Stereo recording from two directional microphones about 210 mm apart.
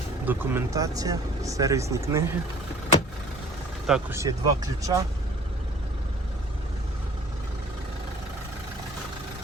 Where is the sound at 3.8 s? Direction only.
5° right (ahead or behind).